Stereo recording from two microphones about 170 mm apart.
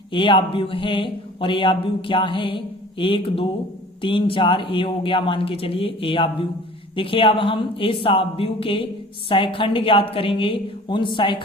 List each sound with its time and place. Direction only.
0.1 s speech: 30° left (ahead or behind)